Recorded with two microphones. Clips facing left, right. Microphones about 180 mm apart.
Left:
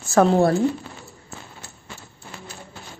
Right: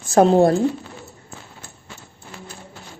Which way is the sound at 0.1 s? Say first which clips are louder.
Right 3 dB; 25° right (ahead or behind).